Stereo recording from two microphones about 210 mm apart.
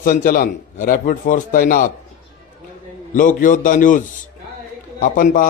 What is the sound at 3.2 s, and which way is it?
A man's voice, 40° left (ahead or behind).